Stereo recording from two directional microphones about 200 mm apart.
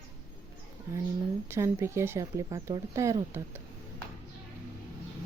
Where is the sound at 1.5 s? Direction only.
15° right (ahead or behind).